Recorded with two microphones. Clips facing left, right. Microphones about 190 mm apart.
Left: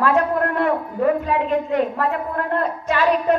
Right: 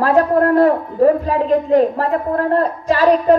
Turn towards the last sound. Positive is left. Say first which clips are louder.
# right 6 dB
turn(degrees=-35)  # may be behind; listen again after turning